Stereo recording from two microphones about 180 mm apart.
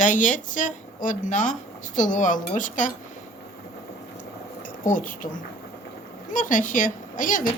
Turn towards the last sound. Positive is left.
turn(degrees=50)  # may be behind; listen again after turning